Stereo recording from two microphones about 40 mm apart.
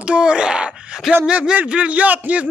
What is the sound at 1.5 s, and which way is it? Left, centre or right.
Speech, right.